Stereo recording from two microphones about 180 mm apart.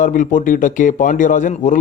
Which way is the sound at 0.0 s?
45° left (ahead or behind).